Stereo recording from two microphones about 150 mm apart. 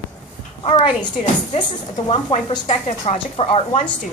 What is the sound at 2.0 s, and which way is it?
A woman's voice, 40° left (ahead or behind).